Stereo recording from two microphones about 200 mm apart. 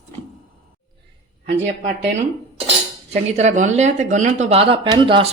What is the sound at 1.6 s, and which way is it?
Speech, 40° right (ahead or behind).